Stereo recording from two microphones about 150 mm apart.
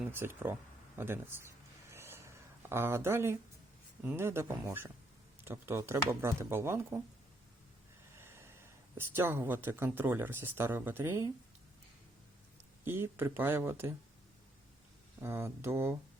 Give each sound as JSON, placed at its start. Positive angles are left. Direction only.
{"t": 0.0, "sound": "speech", "side_deg": -15}
{"t": 0.9, "sound": "a sound", "side_deg": -15}
{"t": 4.0, "sound": "speech", "side_deg": -15}
{"t": 8.1, "sound": "speech", "side_deg": -15}
{"t": 12.8, "sound": "speech", "side_deg": -15}
{"t": 15.2, "sound": "speech", "side_deg": -15}